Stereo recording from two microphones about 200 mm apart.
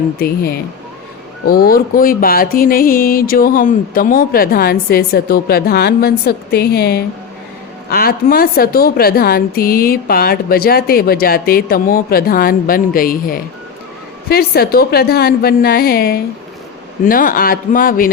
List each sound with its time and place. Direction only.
0.2 s music: 50° left (ahead or behind)